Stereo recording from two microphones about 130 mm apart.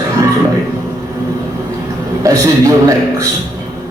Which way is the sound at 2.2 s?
25° right (ahead or behind).